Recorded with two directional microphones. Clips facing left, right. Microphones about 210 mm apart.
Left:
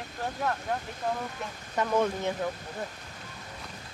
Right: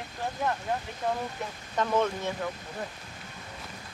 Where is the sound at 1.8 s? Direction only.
10° left (ahead or behind).